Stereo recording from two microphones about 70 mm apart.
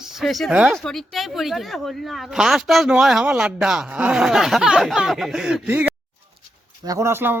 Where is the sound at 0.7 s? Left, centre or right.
Centre.